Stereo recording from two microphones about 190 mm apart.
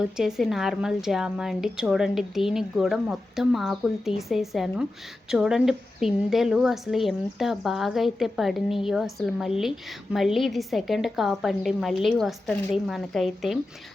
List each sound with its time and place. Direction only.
0.0 s a woman's voice: 5° right (ahead or behind)